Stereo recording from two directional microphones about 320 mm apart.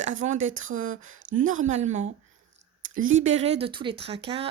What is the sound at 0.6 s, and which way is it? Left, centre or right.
Speech, right.